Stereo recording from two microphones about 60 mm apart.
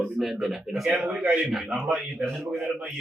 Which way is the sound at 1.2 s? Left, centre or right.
Right.